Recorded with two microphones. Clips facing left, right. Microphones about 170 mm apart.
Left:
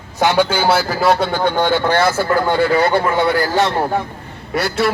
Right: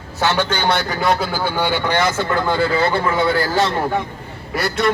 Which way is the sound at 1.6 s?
15° right (ahead or behind).